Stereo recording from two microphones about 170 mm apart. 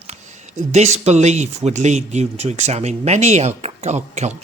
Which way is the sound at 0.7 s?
40° right (ahead or behind).